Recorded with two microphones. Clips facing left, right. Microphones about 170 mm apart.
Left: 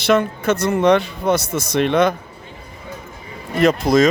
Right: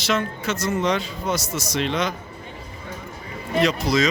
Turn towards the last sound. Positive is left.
turn(degrees=50)  # may be behind; listen again after turning